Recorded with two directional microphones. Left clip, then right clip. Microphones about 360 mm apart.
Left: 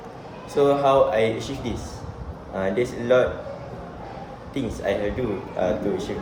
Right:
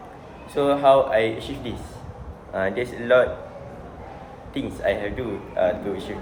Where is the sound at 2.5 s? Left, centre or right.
Centre.